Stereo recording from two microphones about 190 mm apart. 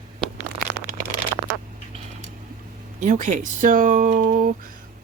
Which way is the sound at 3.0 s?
40° right (ahead or behind).